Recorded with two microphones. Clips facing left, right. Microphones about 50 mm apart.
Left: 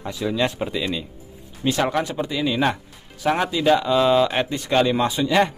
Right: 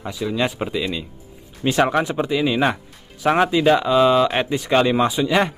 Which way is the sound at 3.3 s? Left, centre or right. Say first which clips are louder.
Right 3 dB; right.